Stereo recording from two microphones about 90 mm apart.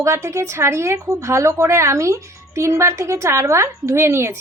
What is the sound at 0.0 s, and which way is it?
A woman's voice, 35° right (ahead or behind).